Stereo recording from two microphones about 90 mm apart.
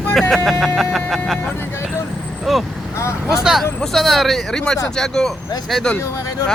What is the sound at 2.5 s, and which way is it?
Speech, centre (ahead or behind).